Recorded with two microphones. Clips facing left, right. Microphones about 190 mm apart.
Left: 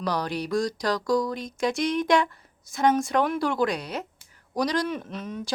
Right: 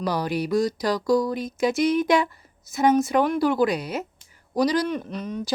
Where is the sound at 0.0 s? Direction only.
5° right (ahead or behind).